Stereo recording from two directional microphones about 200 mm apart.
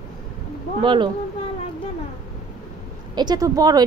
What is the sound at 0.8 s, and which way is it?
Speech, 25° right (ahead or behind).